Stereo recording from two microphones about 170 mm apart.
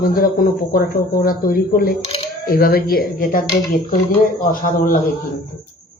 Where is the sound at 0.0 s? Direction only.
55° left (ahead or behind).